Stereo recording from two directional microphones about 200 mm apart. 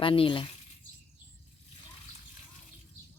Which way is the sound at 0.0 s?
25° left (ahead or behind).